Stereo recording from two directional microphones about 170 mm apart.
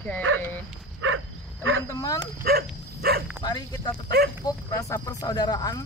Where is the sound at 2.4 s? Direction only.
65° right (ahead or behind).